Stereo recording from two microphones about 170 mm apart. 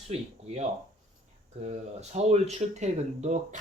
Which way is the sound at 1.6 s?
40° right (ahead or behind).